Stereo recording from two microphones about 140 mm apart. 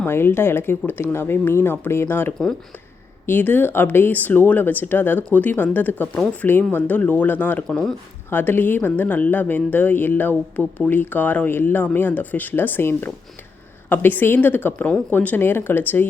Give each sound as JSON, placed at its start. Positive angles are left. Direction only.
{"t": 0.0, "sound": "speech", "side_deg": 15}